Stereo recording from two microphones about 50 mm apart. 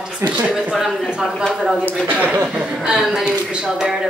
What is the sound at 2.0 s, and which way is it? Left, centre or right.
Speech, right.